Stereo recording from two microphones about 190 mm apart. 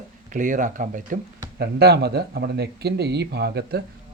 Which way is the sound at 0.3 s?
40° right (ahead or behind).